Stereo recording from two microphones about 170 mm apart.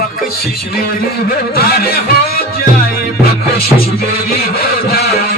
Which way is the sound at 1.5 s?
65° left (ahead or behind).